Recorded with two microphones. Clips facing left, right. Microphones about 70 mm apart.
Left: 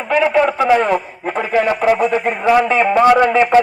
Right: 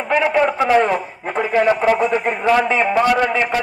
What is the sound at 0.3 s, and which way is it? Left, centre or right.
A man's voice, centre.